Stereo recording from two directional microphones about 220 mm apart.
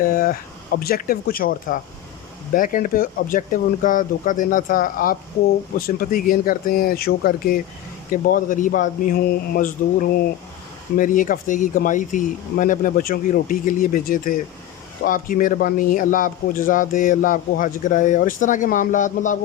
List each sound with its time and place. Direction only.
0.0 s speech: 40° left (ahead or behind)